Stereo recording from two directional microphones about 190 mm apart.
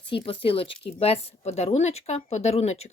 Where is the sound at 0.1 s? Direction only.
30° left (ahead or behind).